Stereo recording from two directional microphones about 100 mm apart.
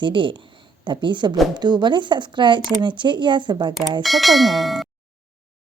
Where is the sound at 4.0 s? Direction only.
Centre (ahead or behind).